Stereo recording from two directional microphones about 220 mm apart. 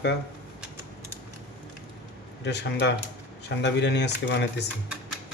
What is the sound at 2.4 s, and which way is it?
Speech, 50° left (ahead or behind).